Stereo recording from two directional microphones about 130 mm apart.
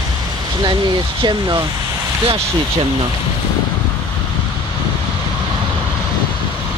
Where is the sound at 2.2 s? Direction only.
45° right (ahead or behind).